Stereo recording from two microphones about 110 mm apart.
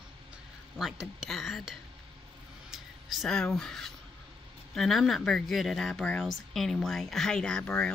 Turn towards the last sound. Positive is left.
turn(degrees=10)  # may be behind; listen again after turning